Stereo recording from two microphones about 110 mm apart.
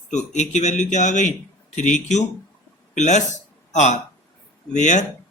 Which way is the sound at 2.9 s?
90° left.